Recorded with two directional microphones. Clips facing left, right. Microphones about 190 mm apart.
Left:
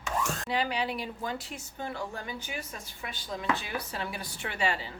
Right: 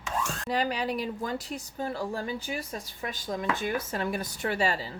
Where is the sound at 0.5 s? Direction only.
40° right (ahead or behind).